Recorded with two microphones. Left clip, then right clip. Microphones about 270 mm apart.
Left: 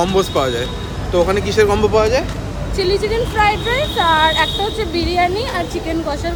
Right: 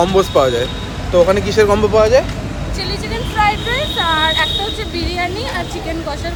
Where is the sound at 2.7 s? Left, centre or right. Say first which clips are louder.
Left 7 dB; centre.